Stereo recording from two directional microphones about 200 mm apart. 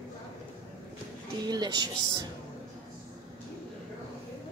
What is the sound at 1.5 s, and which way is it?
Speech, 20° right (ahead or behind).